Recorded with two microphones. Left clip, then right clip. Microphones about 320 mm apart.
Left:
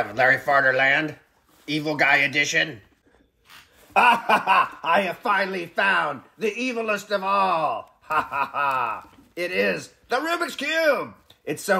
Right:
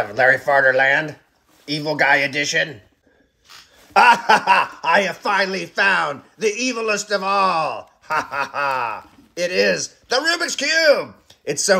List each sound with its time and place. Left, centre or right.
0.0 s a man's voice: right
3.9 s a man's voice: right